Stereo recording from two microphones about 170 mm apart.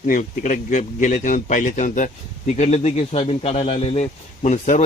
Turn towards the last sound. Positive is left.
turn(degrees=45)  # may be behind; listen again after turning